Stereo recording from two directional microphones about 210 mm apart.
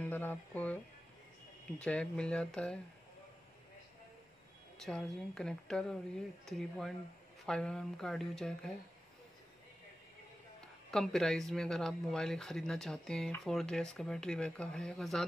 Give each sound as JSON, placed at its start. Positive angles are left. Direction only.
{"t": 0.0, "sound": "speech", "side_deg": 10}
{"t": 1.8, "sound": "speech", "side_deg": 5}
{"t": 4.7, "sound": "speech", "side_deg": 0}
{"t": 10.9, "sound": "speech", "side_deg": 0}